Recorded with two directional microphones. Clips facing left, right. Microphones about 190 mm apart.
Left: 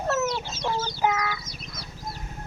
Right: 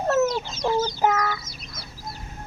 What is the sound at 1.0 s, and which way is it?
Speech, 45° right (ahead or behind).